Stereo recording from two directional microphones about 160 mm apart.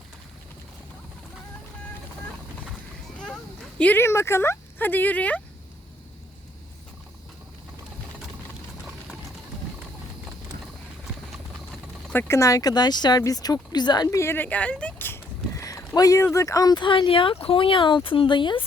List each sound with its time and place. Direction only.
3.8 s speech: 10° left (ahead or behind)
12.0 s speech: 15° left (ahead or behind); by 18.6 s 30° left (ahead or behind)